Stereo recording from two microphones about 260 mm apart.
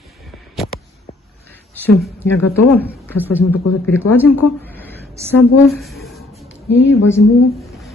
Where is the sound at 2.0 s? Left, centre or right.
Centre.